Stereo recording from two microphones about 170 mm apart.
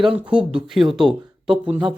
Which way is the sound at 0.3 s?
5° right (ahead or behind).